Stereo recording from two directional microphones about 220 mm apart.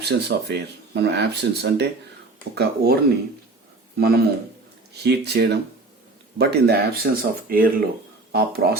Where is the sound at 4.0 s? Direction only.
45° right (ahead or behind).